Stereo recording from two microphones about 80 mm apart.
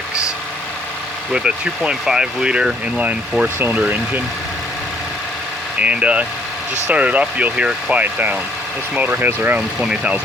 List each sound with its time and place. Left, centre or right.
1.3 s speech: centre
5.8 s speech: centre
9.8 s speech: centre